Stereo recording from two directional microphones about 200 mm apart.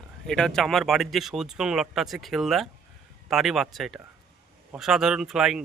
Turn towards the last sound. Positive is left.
turn(degrees=-5)  # may be behind; listen again after turning